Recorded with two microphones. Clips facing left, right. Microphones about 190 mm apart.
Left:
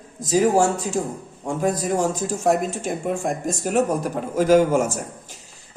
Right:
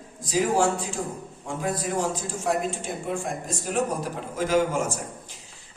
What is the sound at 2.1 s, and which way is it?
Speech, 45° left (ahead or behind).